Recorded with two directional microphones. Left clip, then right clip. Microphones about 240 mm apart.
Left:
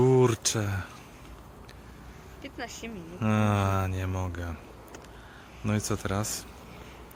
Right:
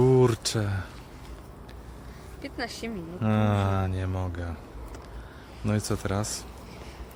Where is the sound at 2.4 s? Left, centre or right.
Right.